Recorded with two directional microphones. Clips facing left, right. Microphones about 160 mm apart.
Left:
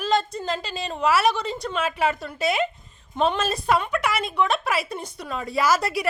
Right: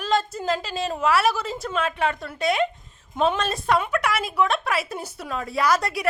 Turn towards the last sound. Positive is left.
turn(degrees=0)  # may be behind; listen again after turning